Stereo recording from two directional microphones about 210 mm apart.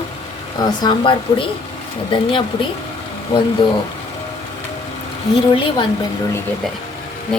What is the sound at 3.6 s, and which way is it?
Speech, 25° left (ahead or behind).